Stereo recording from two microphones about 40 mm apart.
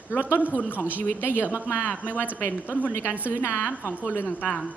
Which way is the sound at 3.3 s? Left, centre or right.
Left.